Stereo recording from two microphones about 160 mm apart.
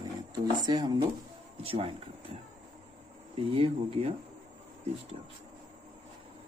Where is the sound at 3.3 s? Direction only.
35° right (ahead or behind).